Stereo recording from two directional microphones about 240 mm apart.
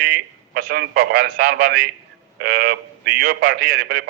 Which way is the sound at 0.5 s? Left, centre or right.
Right.